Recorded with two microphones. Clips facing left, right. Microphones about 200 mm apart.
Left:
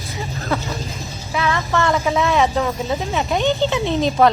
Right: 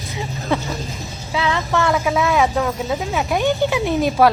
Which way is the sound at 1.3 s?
15° right (ahead or behind).